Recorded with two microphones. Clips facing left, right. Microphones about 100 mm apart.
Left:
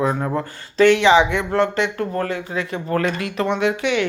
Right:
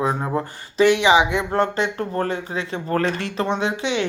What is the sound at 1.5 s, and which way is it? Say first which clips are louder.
Speech: left 3 dB; 35° right (ahead or behind).